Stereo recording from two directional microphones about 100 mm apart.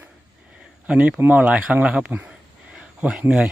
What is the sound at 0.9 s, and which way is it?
Speech, 10° right (ahead or behind).